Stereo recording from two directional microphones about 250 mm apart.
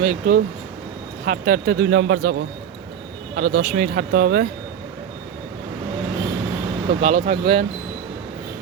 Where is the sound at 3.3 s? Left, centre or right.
Right.